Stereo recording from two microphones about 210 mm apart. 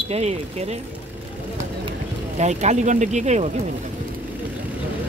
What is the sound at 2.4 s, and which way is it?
Speech, 35° right (ahead or behind).